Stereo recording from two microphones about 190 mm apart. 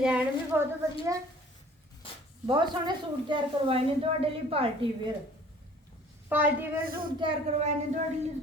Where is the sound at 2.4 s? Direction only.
25° right (ahead or behind).